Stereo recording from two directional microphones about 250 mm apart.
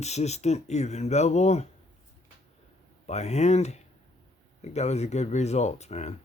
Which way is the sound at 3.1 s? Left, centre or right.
Left.